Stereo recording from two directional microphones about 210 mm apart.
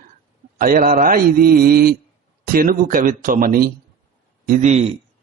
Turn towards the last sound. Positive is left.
turn(degrees=-30)  # may be behind; listen again after turning